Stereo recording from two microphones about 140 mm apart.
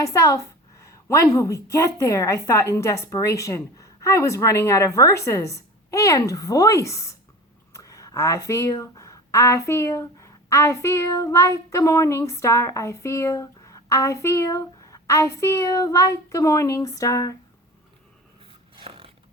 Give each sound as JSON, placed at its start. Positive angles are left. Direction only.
{"t": 0.0, "sound": "a woman's voice", "side_deg": 20}
{"t": 18.8, "sound": "dog", "side_deg": -40}